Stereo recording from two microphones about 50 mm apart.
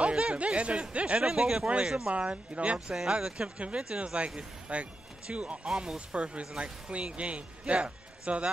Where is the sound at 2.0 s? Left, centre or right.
Right.